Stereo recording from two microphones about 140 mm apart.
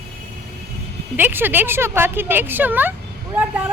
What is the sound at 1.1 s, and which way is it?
Speech, 15° right (ahead or behind).